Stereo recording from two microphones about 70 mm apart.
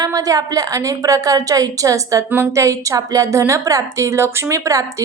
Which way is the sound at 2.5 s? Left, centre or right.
Right.